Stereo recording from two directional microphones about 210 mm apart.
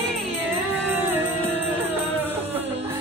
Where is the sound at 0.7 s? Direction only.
10° right (ahead or behind).